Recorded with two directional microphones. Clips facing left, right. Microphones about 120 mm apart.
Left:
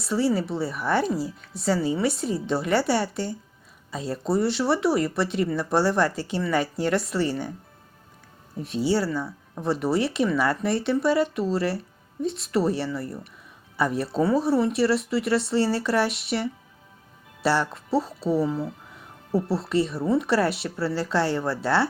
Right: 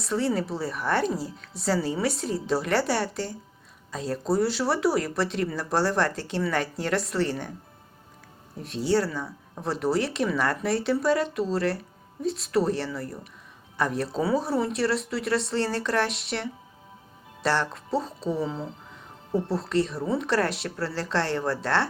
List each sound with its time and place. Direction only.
0.0 s speech: centre (ahead or behind)
8.5 s speech: centre (ahead or behind)